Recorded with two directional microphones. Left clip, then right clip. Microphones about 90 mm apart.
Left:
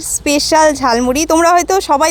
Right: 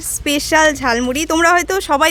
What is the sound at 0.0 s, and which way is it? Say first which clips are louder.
Speech: left 4 dB; 25° left (ahead or behind).